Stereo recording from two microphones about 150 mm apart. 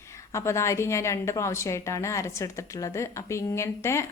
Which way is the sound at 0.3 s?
20° left (ahead or behind).